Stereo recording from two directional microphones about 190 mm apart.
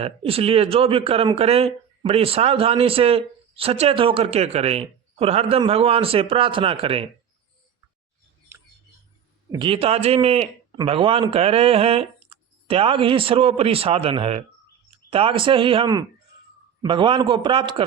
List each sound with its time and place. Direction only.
0.0 s a man's voice: 30° right (ahead or behind)
9.5 s a man's voice: 25° right (ahead or behind)